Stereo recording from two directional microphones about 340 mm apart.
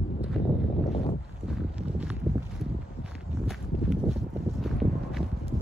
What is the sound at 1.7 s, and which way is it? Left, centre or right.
Walk, centre.